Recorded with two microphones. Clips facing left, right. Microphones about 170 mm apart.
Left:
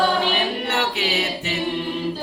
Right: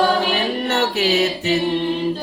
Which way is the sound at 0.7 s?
40° right (ahead or behind).